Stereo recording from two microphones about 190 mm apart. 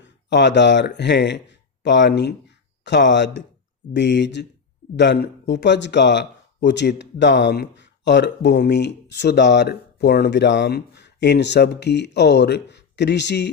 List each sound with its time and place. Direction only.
0.0 s speech: 65° left (ahead or behind)